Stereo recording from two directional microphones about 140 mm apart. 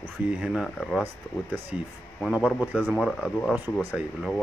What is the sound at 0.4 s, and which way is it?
Speech, centre (ahead or behind).